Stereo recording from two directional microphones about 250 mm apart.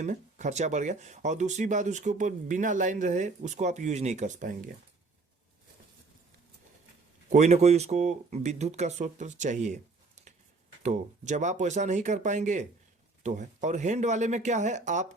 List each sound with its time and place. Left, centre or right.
0.0 s speech: right
7.3 s speech: right